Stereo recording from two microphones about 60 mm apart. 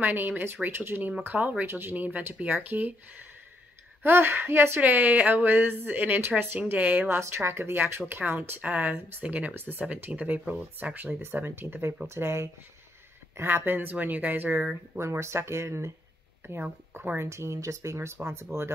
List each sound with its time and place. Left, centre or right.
0.0 s speech: right
7.1 s speech: right
8.5 s speech: right
15.0 s speech: right
16.9 s speech: right
17.2 s speech: right